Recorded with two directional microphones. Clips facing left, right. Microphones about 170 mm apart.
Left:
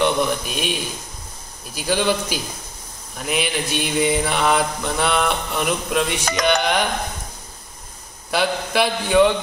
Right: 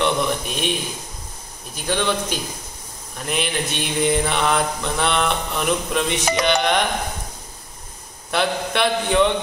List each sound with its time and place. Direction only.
0.0 s mantra: centre (ahead or behind)
1.8 s mantra: 5° left (ahead or behind)
8.3 s mantra: 5° left (ahead or behind)